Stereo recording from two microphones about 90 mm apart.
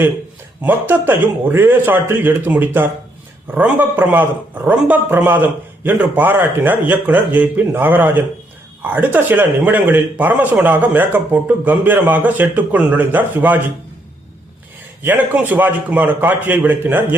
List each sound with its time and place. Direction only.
0.6 s a man's voice: 20° right (ahead or behind)
15.0 s a man's voice: 20° right (ahead or behind)